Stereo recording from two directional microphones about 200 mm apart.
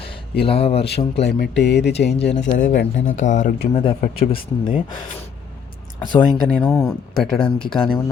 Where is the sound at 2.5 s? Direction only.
40° left (ahead or behind).